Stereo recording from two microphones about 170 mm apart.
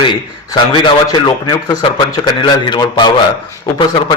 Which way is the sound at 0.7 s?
25° left (ahead or behind).